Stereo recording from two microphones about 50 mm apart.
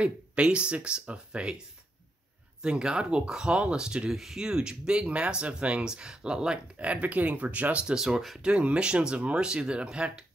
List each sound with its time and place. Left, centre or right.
0.0 s speech: right
2.6 s speech: centre
4.1 s speech: centre
6.8 s speech: right
7.8 s speech: centre
8.4 s speech: right